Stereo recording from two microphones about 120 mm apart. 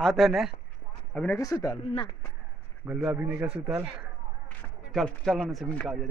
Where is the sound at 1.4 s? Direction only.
30° left (ahead or behind).